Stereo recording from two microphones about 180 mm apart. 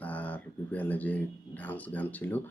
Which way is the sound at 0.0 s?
10° left (ahead or behind).